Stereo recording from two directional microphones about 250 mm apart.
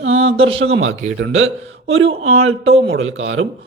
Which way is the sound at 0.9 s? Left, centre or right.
Right.